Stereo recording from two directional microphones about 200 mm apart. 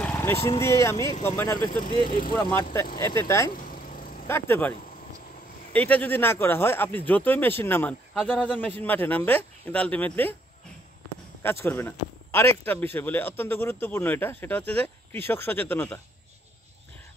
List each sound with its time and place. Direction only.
0.0 s speech: 10° left (ahead or behind)
2.0 s speech: 45° left (ahead or behind)
2.3 s speech: 10° left (ahead or behind)
3.6 s vehicle: 45° left (ahead or behind)
4.3 s speech: 10° left (ahead or behind)
11.4 s speech: 10° left (ahead or behind)